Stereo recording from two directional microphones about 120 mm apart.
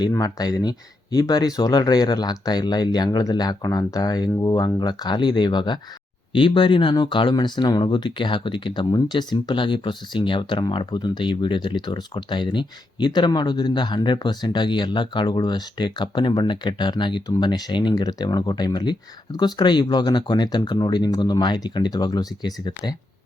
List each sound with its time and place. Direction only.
0.1 s speech: 30° left (ahead or behind)